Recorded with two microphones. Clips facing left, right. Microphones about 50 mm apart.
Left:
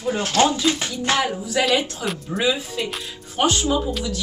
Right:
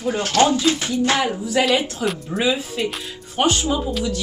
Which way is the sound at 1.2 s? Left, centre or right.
Centre.